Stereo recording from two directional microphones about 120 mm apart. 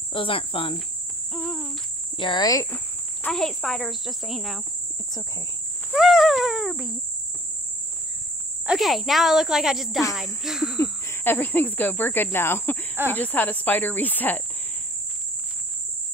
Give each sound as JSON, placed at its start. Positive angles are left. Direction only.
{"t": 0.1, "sound": "speech", "side_deg": 50}
{"t": 1.3, "sound": "speech", "side_deg": 5}
{"t": 2.1, "sound": "speech", "side_deg": 40}
{"t": 3.3, "sound": "insect", "side_deg": 5}
{"t": 5.9, "sound": "insect", "side_deg": 0}
{"t": 8.6, "sound": "insect", "side_deg": 0}
{"t": 10.8, "sound": "speech", "side_deg": 20}